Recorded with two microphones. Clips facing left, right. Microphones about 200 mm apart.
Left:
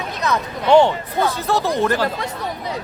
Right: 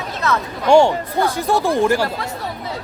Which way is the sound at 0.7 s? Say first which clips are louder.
Right 1 dB; 10° right (ahead or behind).